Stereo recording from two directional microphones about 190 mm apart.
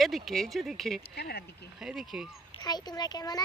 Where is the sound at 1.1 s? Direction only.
55° left (ahead or behind).